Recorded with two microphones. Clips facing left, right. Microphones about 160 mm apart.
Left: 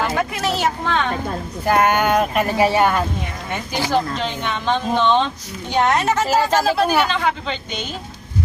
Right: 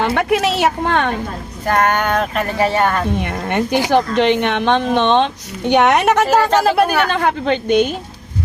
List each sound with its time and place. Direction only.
0.0 s a woman's voice: 70° right (ahead or behind)
1.6 s speech: 10° left (ahead or behind)
3.2 s a woman's voice: 75° right (ahead or behind); by 7.9 s 55° right (ahead or behind)